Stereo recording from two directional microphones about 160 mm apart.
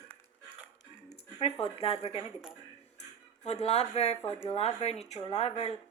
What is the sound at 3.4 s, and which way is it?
Speech, 40° left (ahead or behind).